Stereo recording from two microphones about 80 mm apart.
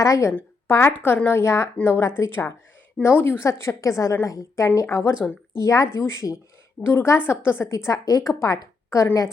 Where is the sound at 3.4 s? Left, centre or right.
Left.